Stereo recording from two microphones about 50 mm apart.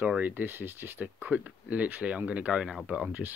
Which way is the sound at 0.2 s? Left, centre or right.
Right.